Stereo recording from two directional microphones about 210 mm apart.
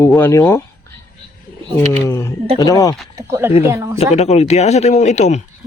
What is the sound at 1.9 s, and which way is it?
A man's voice, 15° left (ahead or behind).